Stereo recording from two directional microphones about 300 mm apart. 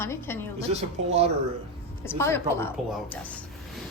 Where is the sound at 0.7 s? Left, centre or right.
Right.